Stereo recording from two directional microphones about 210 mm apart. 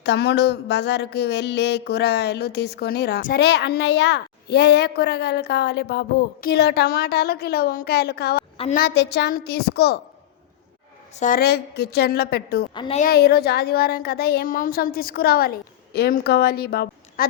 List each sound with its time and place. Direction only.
0.0 s speech: 55° left (ahead or behind)
11.1 s speech: 35° left (ahead or behind)
12.7 s a woman's voice: 20° left (ahead or behind)
13.0 s speech: 45° left (ahead or behind)